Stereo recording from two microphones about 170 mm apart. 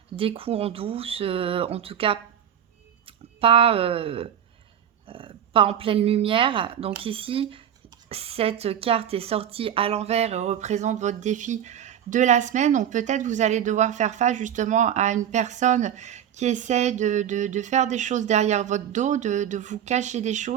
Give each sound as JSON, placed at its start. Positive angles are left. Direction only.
{"t": 0.2, "sound": "speech", "side_deg": -35}